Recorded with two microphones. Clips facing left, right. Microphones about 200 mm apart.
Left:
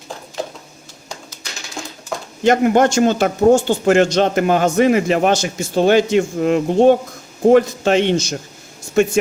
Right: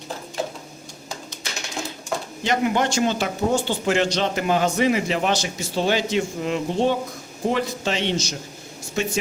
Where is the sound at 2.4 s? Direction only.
50° left (ahead or behind).